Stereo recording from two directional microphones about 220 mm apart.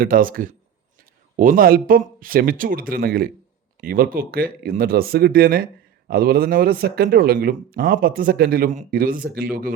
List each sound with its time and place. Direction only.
0.0 s speech: 40° right (ahead or behind)